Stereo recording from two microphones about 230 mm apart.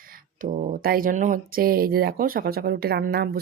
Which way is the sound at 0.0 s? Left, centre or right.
Right.